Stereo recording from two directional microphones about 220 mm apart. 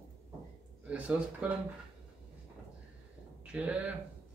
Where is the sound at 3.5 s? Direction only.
5° right (ahead or behind).